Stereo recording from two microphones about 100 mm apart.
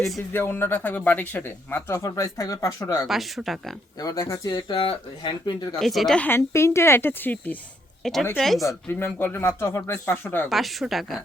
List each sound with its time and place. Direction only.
0.3 s speech: 20° left (ahead or behind)
3.1 s speech: centre (ahead or behind)
3.9 s speech: 35° left (ahead or behind)
4.5 s speech: 65° left (ahead or behind)
5.8 s speech: centre (ahead or behind)
6.1 s speech: 20° left (ahead or behind)
8.0 s speech: 5° left (ahead or behind)
8.6 s speech: 25° left (ahead or behind)
10.5 s speech: centre (ahead or behind)